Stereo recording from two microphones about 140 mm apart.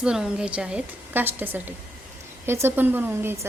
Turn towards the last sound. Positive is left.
turn(degrees=-15)  # may be behind; listen again after turning